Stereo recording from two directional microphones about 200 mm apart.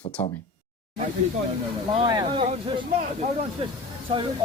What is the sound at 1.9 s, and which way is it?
Speech, 20° right (ahead or behind).